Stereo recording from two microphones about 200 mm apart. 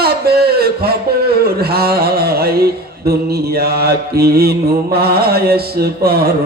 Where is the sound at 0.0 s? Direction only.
50° right (ahead or behind).